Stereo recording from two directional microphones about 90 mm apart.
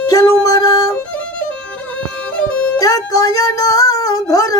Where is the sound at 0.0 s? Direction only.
40° left (ahead or behind).